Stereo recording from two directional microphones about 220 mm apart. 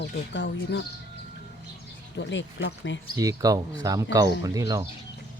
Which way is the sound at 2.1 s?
55° left (ahead or behind).